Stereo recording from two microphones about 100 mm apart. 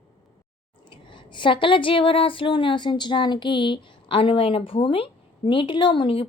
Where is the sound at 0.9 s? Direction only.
55° left (ahead or behind).